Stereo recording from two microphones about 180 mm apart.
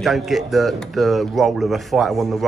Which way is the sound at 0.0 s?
Centre (ahead or behind).